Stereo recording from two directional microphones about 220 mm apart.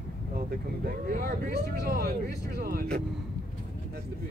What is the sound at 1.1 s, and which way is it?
Speech, 40° right (ahead or behind).